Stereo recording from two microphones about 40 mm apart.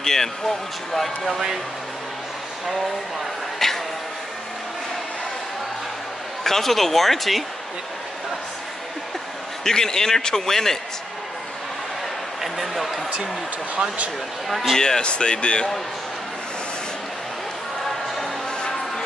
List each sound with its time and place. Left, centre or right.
0.0 s speech: centre
3.5 s a sound: centre
6.4 s speech: centre
9.7 s speech: centre
12.4 s speech: centre
14.5 s speech: centre
14.8 s speech: centre
18.2 s music: centre